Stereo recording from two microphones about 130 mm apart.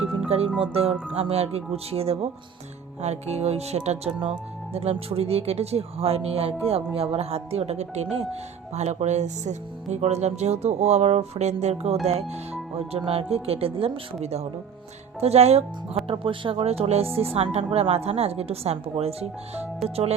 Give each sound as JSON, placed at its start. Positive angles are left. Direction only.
{"t": 0.3, "sound": "speech", "side_deg": -50}